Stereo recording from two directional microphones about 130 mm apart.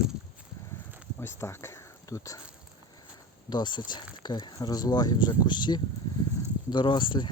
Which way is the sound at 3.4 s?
35° left (ahead or behind).